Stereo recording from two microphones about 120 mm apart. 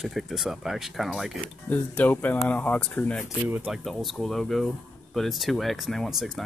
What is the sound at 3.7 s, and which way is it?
Speech, centre (ahead or behind).